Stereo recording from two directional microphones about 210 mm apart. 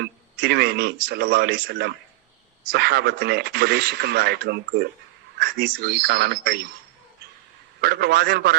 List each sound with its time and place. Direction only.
0.0 s speech: 50° right (ahead or behind)
7.8 s speech: 50° right (ahead or behind)